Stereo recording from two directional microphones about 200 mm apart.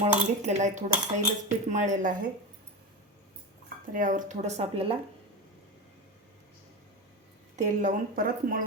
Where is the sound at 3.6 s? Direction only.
40° right (ahead or behind).